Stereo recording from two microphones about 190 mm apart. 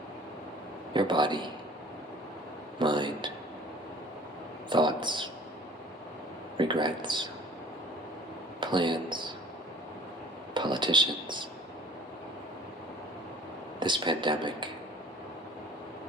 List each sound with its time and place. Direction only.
0.9 s speech: 25° right (ahead or behind)
2.7 s speech: 25° right (ahead or behind)
4.7 s a sound: 25° right (ahead or behind)
6.6 s speech: 25° right (ahead or behind)
8.6 s speech: 25° right (ahead or behind)
10.5 s speech: 25° right (ahead or behind)
13.7 s speech: 25° right (ahead or behind)